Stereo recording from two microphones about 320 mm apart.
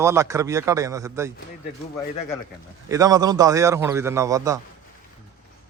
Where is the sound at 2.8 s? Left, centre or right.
Centre.